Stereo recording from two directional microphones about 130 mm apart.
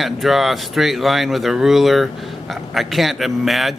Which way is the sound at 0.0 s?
Centre (ahead or behind).